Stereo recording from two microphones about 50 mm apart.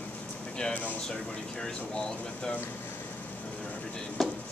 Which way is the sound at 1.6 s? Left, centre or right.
Centre.